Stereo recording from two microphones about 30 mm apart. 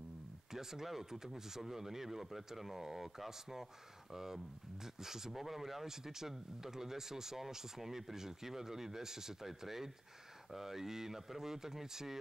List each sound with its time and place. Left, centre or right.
0.5 s speech: centre